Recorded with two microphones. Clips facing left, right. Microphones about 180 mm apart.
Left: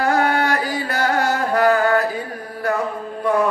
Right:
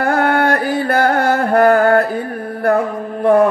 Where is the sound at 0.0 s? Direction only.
55° right (ahead or behind).